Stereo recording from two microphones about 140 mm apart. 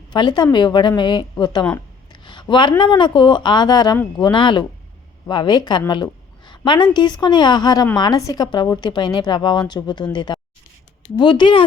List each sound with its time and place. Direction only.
0.1 s a woman's voice: 30° left (ahead or behind)